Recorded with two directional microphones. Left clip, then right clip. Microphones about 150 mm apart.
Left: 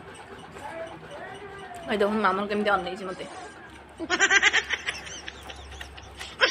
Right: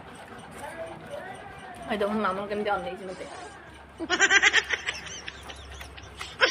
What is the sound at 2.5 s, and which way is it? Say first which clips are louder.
Speech: left 4 dB; 60° left (ahead or behind).